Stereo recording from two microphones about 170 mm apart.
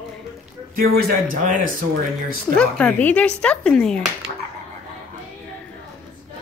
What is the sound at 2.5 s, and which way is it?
Speech, 5° left (ahead or behind).